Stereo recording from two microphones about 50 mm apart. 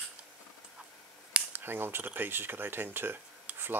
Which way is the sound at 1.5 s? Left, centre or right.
Right.